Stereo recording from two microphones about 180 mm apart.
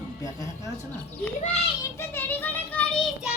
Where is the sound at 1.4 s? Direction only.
40° left (ahead or behind).